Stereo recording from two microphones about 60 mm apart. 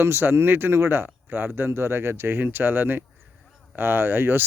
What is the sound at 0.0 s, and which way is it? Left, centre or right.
Speech, right.